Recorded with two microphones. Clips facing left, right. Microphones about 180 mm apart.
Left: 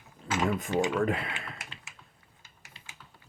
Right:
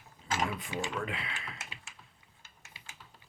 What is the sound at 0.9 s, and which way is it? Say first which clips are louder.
Speech: left 9 dB; 45° left (ahead or behind).